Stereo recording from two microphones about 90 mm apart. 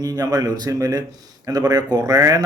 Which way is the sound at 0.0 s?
45° right (ahead or behind).